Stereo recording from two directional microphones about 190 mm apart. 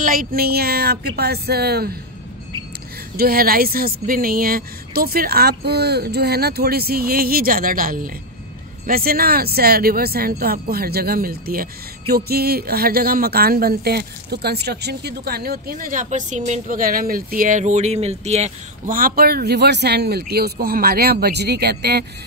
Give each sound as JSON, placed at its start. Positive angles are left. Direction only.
{"t": 0.0, "sound": "speech", "side_deg": -45}
{"t": 3.2, "sound": "speech", "side_deg": -50}